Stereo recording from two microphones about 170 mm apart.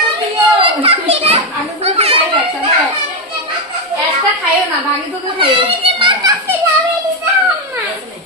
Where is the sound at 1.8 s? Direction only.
35° right (ahead or behind).